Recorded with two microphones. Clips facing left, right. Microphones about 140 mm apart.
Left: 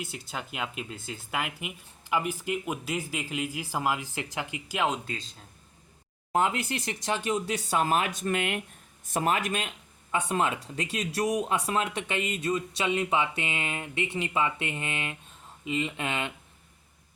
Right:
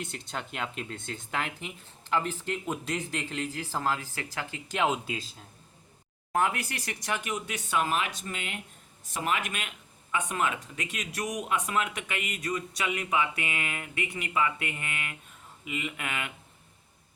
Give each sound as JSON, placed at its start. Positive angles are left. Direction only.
{"t": 0.0, "sound": "speech", "side_deg": 5}
{"t": 4.8, "sound": "speech", "side_deg": -5}
{"t": 6.3, "sound": "speech", "side_deg": 20}
{"t": 8.2, "sound": "speech", "side_deg": 55}
{"t": 9.1, "sound": "speech", "side_deg": 40}